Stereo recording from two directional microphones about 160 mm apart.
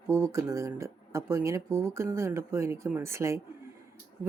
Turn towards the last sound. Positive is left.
turn(degrees=-15)  # may be behind; listen again after turning